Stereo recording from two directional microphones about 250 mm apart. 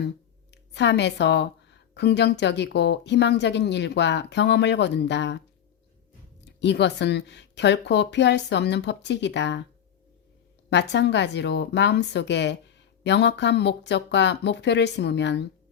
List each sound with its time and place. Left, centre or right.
0.5 s a woman's voice: left
6.6 s speech: left
10.7 s speech: left